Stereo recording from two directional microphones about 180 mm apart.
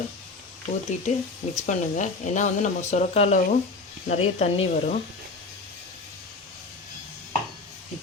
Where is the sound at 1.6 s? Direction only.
40° left (ahead or behind).